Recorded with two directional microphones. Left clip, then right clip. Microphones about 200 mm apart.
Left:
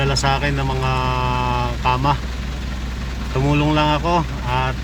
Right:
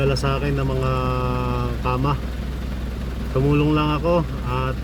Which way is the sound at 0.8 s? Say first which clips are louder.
Left 6 dB; 5° right (ahead or behind).